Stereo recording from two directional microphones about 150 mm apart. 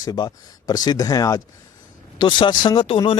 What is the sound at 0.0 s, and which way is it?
Speech, 25° left (ahead or behind).